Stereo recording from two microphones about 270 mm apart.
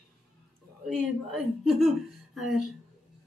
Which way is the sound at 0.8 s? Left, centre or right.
Centre.